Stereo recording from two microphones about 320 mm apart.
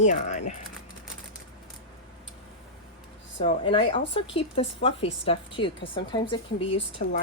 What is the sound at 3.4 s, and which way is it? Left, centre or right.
Speech, centre.